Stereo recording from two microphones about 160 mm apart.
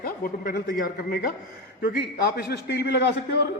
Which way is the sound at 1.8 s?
85° left.